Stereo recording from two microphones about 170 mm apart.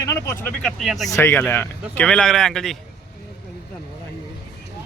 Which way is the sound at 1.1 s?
15° left (ahead or behind).